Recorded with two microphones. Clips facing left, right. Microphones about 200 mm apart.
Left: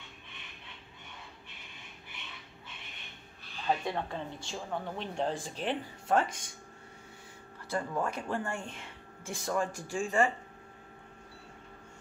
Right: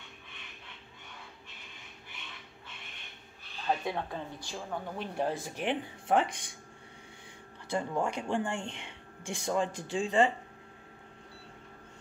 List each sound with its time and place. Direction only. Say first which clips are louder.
3.6 s speech: even; centre (ahead or behind)
7.7 s speech: right 2 dB; 15° right (ahead or behind)